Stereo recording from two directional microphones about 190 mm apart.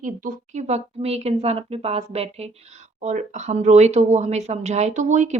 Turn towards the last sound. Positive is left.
turn(degrees=-40)  # may be behind; listen again after turning